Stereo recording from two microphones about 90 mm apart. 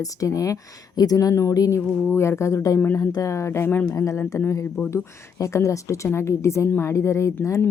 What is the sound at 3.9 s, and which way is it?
Speech, 35° left (ahead or behind).